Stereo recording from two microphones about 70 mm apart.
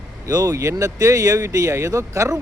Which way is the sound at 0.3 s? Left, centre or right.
Right.